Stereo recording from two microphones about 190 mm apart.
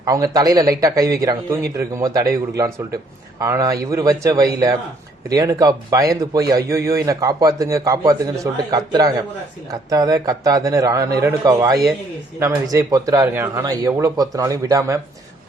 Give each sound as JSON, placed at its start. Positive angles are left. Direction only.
{"t": 0.0, "sound": "a man's voice", "side_deg": -20}